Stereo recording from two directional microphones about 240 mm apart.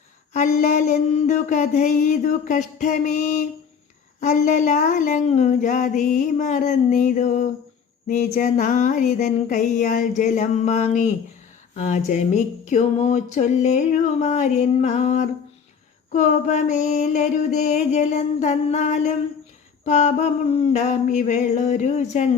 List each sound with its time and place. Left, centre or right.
0.3 s speech: left
11.7 s a sound: left
20.7 s speech: left